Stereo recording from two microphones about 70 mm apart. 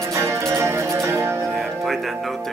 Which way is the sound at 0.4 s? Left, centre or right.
Right.